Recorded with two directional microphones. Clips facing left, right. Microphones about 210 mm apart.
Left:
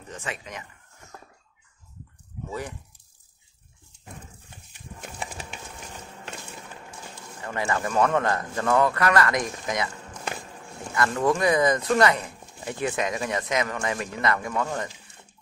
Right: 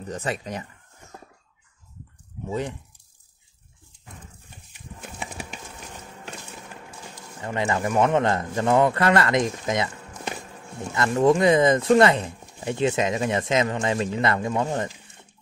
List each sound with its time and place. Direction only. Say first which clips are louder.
0.1 s speech: right 7 dB; 35° right (ahead or behind)
7.4 s speech: right 3 dB; 20° right (ahead or behind)
11.1 s speech: right 6 dB; 20° right (ahead or behind)